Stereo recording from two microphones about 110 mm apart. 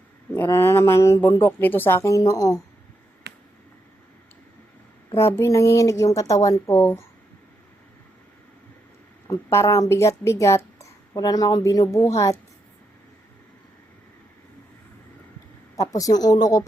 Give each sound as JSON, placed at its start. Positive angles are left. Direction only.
{"t": 0.4, "sound": "speech", "side_deg": 25}
{"t": 5.1, "sound": "speech", "side_deg": 25}
{"t": 9.5, "sound": "a woman's voice", "side_deg": 25}
{"t": 15.7, "sound": "a woman's voice", "side_deg": 30}